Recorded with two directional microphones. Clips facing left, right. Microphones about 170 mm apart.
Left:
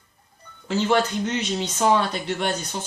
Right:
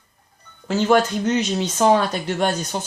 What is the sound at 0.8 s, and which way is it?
Speech, 45° right (ahead or behind).